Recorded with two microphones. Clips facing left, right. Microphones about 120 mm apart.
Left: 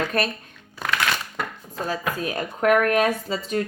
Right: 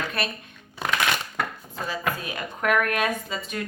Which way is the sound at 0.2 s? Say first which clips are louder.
Left 6 dB; 40° left (ahead or behind).